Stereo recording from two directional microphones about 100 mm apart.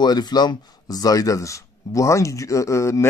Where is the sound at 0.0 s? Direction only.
45° left (ahead or behind).